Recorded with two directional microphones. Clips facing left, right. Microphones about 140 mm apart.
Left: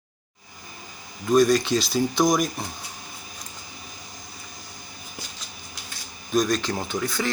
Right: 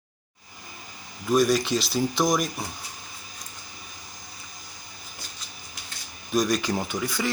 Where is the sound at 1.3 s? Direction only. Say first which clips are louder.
Left 3 dB; 5° right (ahead or behind).